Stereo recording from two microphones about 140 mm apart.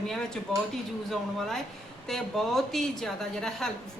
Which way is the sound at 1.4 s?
5° left (ahead or behind).